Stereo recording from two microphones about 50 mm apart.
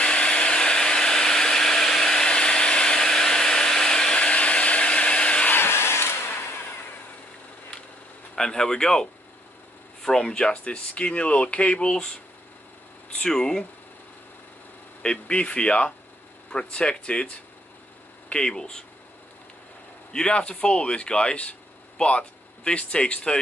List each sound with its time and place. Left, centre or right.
0.0 s a sound: left
5.5 s vehicle: left
8.4 s speech: centre
13.2 s speech: centre
15.0 s speech: left
18.3 s speech: centre
20.1 s speech: centre